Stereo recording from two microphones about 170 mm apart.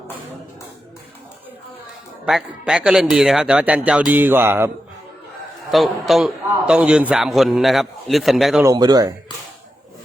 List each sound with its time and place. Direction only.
2.2 s a man's voice: 5° right (ahead or behind)
3.8 s music: 5° right (ahead or behind)
5.7 s a man's voice: centre (ahead or behind)
8.6 s speech: 25° right (ahead or behind)